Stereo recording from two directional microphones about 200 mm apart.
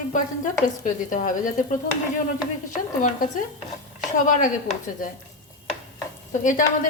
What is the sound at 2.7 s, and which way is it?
Speech, 40° left (ahead or behind).